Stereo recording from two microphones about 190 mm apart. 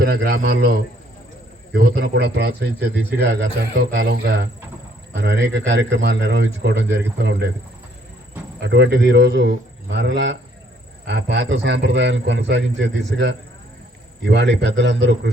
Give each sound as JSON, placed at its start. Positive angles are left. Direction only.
{"t": 0.0, "sound": "a man's voice", "side_deg": -55}
{"t": 4.2, "sound": "a man's voice", "side_deg": -65}
{"t": 8.6, "sound": "a man's voice", "side_deg": -65}